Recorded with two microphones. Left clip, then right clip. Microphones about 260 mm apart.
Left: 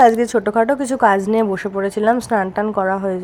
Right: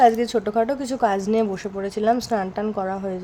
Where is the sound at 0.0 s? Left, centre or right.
Centre.